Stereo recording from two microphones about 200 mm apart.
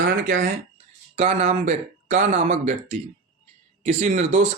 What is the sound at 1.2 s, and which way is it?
Speech, 30° right (ahead or behind).